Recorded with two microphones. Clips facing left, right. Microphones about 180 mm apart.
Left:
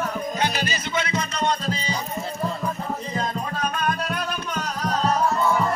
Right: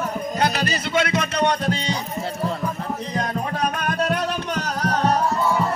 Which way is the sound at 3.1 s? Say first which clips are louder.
Right 4 dB; 70° right (ahead or behind).